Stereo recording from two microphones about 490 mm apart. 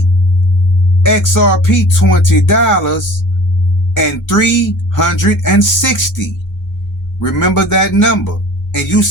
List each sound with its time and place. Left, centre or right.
1.0 s speech: left